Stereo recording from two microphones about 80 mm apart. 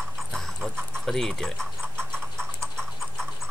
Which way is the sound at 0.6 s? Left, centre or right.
Centre.